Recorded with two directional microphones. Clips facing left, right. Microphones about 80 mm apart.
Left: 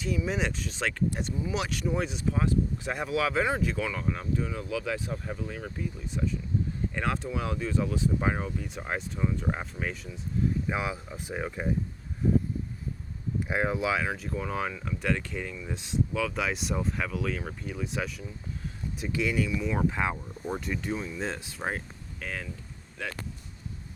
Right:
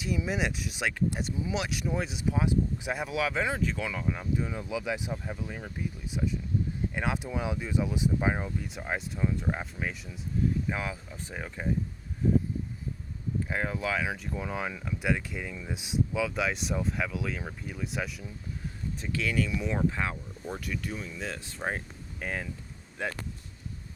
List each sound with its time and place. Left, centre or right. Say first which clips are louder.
0.3 s speech: even; centre
10.7 s speech: left 3 dB; centre
13.5 s speech: left 4 dB; centre
14.0 s speech: left 1 dB; centre
18.9 s speech: left 2 dB; centre
21.6 s speech: even; centre
22.2 s speech: right 2 dB; centre